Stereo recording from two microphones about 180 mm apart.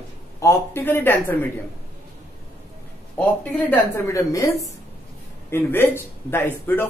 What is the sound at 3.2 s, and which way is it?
Speech, 10° left (ahead or behind).